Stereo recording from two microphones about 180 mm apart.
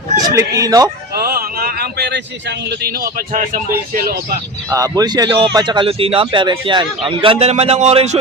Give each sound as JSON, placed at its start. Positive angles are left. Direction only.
{"t": 0.2, "sound": "speech", "side_deg": -20}
{"t": 1.1, "sound": "speech", "side_deg": -55}
{"t": 4.7, "sound": "a man's voice", "side_deg": -20}